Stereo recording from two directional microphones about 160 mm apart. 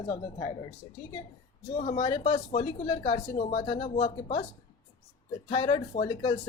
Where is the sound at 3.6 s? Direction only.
30° left (ahead or behind).